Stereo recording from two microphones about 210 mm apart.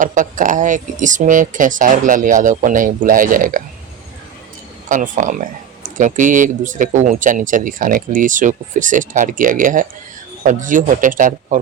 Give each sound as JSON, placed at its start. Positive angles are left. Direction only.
{"t": 0.0, "sound": "speech", "side_deg": -40}
{"t": 4.9, "sound": "speech", "side_deg": -35}